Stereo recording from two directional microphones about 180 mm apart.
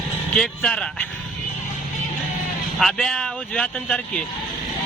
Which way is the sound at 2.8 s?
Centre (ahead or behind).